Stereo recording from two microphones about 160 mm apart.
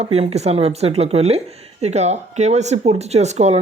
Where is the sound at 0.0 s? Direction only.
40° right (ahead or behind).